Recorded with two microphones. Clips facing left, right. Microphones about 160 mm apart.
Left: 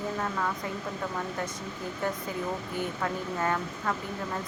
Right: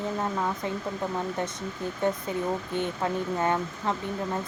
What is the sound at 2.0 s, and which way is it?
Speech, 20° right (ahead or behind).